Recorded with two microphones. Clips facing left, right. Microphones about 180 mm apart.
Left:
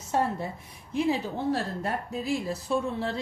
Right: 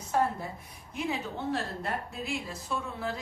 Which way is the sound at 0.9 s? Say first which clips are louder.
Left 7 dB; 35° left (ahead or behind).